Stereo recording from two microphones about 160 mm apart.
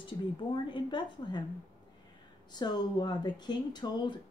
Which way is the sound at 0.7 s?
30° left (ahead or behind).